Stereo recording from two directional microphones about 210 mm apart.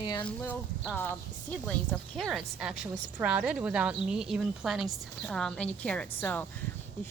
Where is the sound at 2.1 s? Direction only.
Centre (ahead or behind).